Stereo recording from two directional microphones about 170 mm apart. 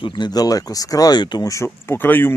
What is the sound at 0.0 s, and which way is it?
Speech, 25° left (ahead or behind).